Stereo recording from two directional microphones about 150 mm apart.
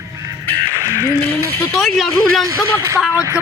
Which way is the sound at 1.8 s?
Centre (ahead or behind).